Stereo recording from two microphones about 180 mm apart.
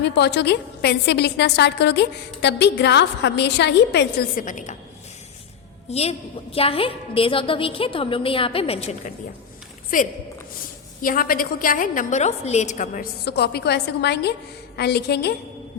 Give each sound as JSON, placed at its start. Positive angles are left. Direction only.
{"t": 0.0, "sound": "a woman's voice", "side_deg": 70}
{"t": 4.4, "sound": "a woman's voice", "side_deg": 45}
{"t": 5.9, "sound": "a woman's voice", "side_deg": 35}
{"t": 9.9, "sound": "a woman's voice", "side_deg": 50}
{"t": 13.2, "sound": "a woman's voice", "side_deg": 65}